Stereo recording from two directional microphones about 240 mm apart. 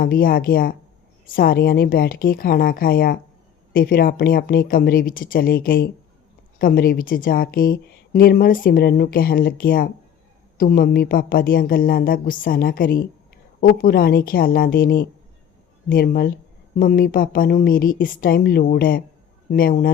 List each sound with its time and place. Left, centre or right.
0.0 s a woman's voice: left